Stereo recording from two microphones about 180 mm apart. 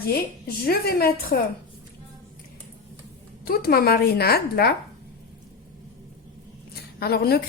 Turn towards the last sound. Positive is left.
turn(degrees=60)  # may be behind; listen again after turning